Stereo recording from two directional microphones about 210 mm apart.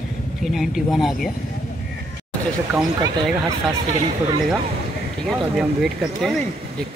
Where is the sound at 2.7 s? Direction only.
15° right (ahead or behind).